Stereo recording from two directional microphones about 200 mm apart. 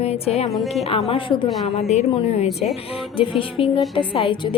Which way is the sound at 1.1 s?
25° left (ahead or behind).